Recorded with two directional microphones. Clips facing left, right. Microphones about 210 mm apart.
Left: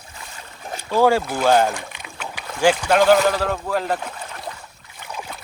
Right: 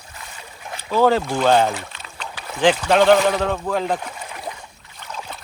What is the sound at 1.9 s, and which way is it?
Boat, 15° left (ahead or behind).